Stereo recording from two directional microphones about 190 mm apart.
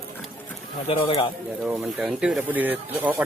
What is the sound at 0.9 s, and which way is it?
Speech, 30° left (ahead or behind).